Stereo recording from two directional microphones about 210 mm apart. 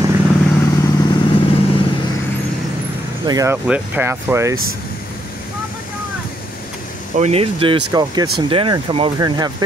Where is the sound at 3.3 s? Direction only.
15° right (ahead or behind).